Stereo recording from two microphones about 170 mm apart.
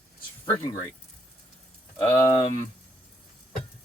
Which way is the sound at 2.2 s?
20° left (ahead or behind).